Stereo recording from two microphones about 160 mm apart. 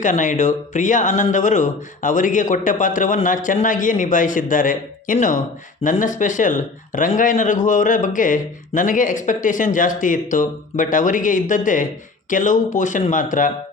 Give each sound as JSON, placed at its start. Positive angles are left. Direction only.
{"t": 0.0, "sound": "speech", "side_deg": 50}